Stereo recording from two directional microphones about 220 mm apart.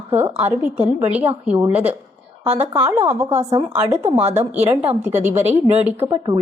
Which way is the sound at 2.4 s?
25° right (ahead or behind).